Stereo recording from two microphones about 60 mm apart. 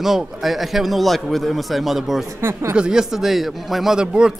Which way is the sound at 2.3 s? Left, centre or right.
Right.